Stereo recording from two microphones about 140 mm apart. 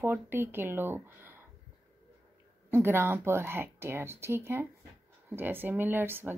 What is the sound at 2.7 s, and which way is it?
Speech, 15° right (ahead or behind).